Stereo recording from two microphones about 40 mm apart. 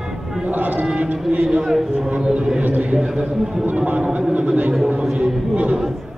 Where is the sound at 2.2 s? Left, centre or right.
Centre.